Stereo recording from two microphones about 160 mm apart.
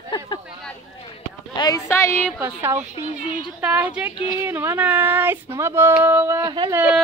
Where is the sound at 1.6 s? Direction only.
20° left (ahead or behind).